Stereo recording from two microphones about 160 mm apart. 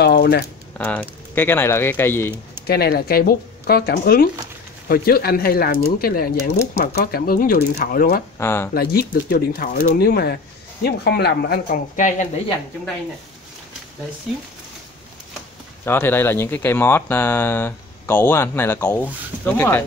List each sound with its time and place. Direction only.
0.0 s a sound: 90° left
0.7 s speech: 10° left (ahead or behind)
2.6 s speech: 80° left; by 8.2 s 65° left (ahead or behind)
8.4 s speech: 15° left (ahead or behind)
8.7 s speech: 70° left (ahead or behind)
12.0 s speech: 50° left (ahead or behind)
15.8 s speech: 15° left (ahead or behind)